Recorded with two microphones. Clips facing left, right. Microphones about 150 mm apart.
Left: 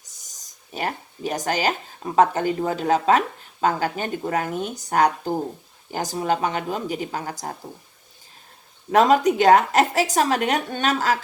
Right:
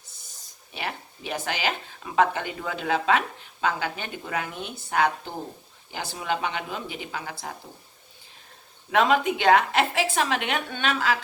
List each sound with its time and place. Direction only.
0.0 s speech: 40° left (ahead or behind)
8.9 s a woman's voice: 40° left (ahead or behind)